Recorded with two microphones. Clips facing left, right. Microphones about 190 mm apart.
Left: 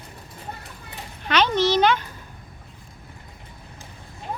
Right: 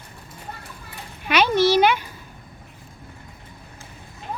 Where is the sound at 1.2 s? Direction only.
10° right (ahead or behind).